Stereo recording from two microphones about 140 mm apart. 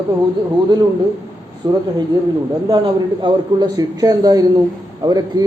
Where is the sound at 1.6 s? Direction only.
30° right (ahead or behind).